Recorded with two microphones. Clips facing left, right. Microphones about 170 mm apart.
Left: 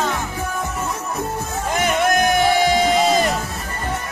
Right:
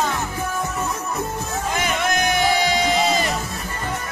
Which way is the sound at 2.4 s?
50° left (ahead or behind).